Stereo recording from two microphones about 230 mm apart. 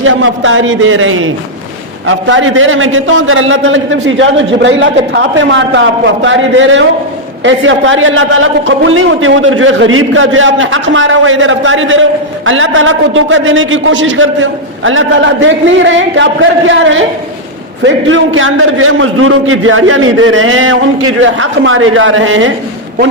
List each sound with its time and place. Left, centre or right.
0.0 s a man's voice: right